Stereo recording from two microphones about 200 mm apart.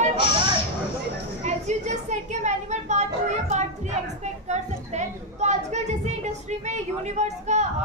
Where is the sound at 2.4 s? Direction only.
35° right (ahead or behind).